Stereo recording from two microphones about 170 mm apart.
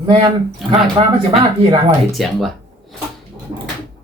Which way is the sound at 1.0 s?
30° right (ahead or behind).